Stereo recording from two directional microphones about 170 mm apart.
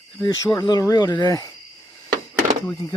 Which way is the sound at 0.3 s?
25° left (ahead or behind).